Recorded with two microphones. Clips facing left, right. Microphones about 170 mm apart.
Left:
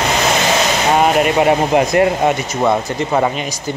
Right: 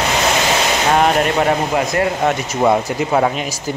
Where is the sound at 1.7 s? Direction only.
20° left (ahead or behind).